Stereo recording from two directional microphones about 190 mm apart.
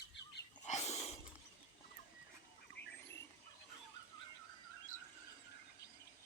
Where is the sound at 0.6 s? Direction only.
35° left (ahead or behind).